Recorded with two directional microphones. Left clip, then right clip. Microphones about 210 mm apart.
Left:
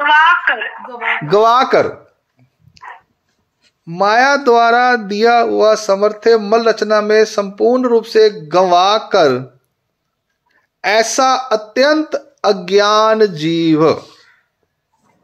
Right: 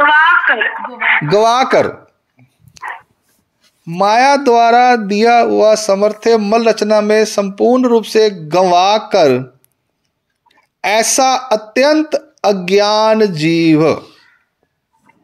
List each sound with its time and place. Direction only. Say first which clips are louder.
0.0 s a sound: right 1 dB; 25° right (ahead or behind)
0.5 s speech: right 4 dB; 30° right (ahead or behind)
10.5 s speech: even; 30° right (ahead or behind)